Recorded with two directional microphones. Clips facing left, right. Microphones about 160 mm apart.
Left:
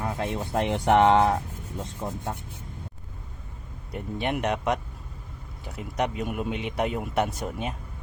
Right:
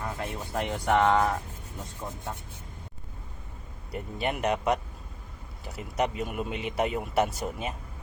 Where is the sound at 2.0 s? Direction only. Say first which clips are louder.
Left 5 dB; 30° left (ahead or behind).